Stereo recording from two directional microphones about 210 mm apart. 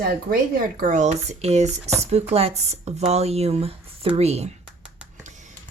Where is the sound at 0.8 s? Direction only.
35° right (ahead or behind).